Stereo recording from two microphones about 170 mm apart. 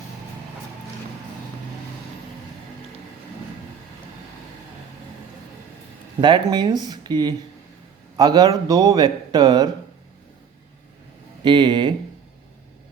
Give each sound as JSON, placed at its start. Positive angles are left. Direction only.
{"t": 6.1, "sound": "a man's voice", "side_deg": -25}
{"t": 11.4, "sound": "a man's voice", "side_deg": -25}